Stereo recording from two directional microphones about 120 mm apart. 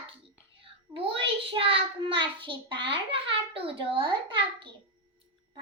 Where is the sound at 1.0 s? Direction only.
50° right (ahead or behind).